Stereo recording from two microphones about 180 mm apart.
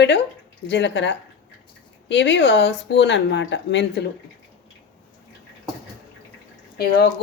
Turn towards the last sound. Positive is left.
turn(degrees=65)  # may be behind; listen again after turning